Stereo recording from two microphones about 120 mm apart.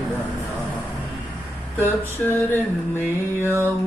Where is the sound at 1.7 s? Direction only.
15° left (ahead or behind).